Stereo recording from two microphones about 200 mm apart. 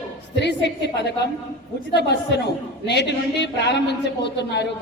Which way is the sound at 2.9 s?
55° left (ahead or behind).